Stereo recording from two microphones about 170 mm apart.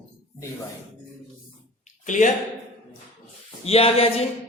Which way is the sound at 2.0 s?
45° left (ahead or behind).